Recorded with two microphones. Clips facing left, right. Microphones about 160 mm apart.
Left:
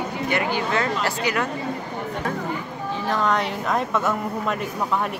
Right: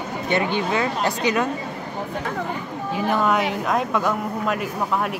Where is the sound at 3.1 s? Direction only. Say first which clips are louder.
Right 2 dB; 5° right (ahead or behind).